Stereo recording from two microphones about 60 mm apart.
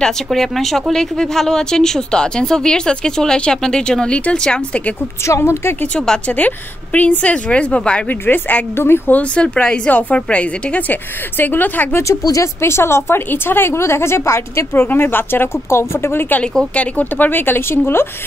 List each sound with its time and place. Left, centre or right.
0.0 s a woman's voice: centre
5.2 s a woman's voice: left
5.9 s a woman's voice: centre
8.7 s speech: left
9.1 s a woman's voice: centre
11.3 s speech: left
12.2 s speech: left
12.6 s a woman's voice: left
16.7 s speech: left